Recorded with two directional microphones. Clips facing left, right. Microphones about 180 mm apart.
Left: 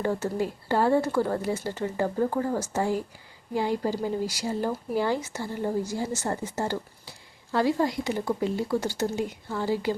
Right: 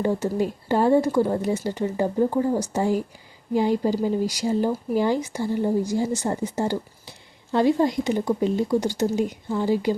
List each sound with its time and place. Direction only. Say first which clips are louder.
0.0 s speech: right 4 dB; 15° right (ahead or behind)